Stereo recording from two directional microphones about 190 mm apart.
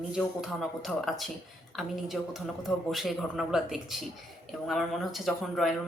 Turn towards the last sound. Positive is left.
turn(degrees=0)  # may be behind; listen again after turning